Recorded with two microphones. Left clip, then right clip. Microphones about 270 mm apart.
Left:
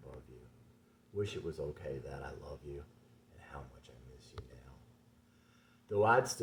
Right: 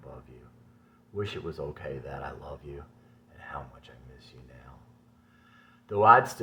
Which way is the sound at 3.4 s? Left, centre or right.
Centre.